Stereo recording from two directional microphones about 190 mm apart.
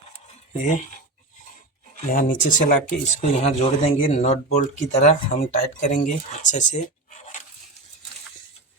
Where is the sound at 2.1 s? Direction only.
50° left (ahead or behind).